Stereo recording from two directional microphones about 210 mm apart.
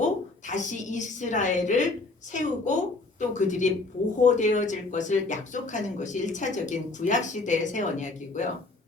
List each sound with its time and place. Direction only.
0.0 s a woman's voice: 35° left (ahead or behind)